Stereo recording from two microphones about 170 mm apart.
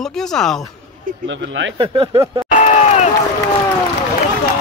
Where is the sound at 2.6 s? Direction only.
40° left (ahead or behind).